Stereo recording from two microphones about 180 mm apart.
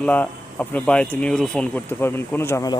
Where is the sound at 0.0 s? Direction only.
10° left (ahead or behind).